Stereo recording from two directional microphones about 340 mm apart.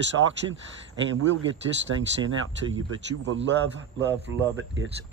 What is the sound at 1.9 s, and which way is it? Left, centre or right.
Speech, right.